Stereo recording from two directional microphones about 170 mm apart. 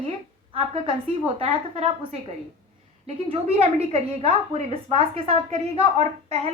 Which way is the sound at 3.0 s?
35° right (ahead or behind).